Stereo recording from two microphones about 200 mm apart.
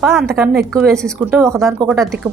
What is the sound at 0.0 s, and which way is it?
A woman's voice, centre (ahead or behind).